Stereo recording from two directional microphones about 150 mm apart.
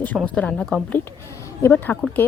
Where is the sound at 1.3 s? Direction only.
20° left (ahead or behind).